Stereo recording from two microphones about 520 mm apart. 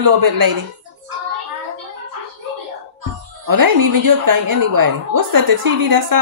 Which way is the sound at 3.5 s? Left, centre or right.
Right.